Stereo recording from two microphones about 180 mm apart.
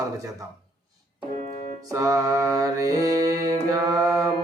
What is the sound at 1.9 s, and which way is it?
Speech, 20° right (ahead or behind).